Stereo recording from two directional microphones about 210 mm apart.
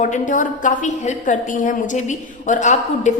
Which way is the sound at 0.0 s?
35° left (ahead or behind).